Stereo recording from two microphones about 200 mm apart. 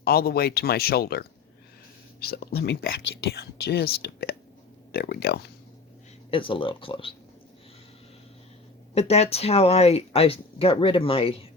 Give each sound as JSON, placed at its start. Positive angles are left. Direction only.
{"t": 0.0, "sound": "speech", "side_deg": 50}
{"t": 2.2, "sound": "speech", "side_deg": 50}
{"t": 6.3, "sound": "speech", "side_deg": 25}
{"t": 9.0, "sound": "speech", "side_deg": 30}